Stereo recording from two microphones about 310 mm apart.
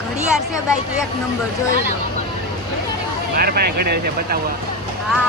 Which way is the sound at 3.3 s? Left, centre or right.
Right.